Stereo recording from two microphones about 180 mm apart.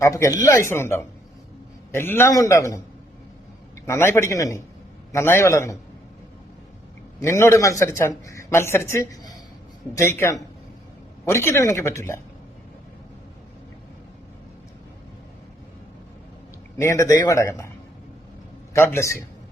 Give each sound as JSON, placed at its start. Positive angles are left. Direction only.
{"t": 0.0, "sound": "a man's voice", "side_deg": 15}
{"t": 3.8, "sound": "a man's voice", "side_deg": 15}
{"t": 7.2, "sound": "a man's voice", "side_deg": 15}
{"t": 16.7, "sound": "a man's voice", "side_deg": 15}
{"t": 18.7, "sound": "a man's voice", "side_deg": 15}